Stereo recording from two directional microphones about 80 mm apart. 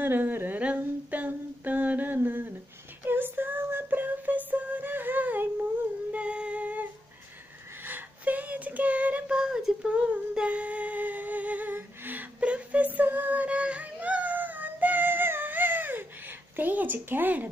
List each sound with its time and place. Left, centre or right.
0.0 s humming: right
3.1 s music: right
7.8 s child singing: right